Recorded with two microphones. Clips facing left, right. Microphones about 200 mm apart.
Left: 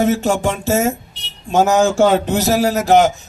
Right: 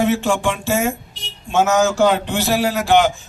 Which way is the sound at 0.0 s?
40° left (ahead or behind).